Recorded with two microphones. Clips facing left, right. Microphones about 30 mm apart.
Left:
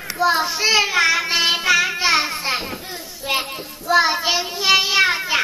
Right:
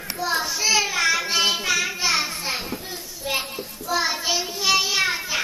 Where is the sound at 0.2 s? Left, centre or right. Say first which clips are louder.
Left 6 dB; left.